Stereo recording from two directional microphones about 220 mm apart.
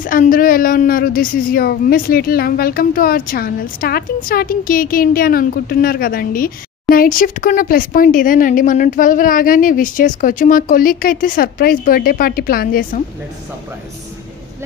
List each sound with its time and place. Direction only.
0.0 s speech: 40° left (ahead or behind)